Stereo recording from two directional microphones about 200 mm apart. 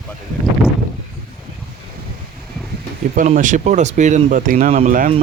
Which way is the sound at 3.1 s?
40° right (ahead or behind).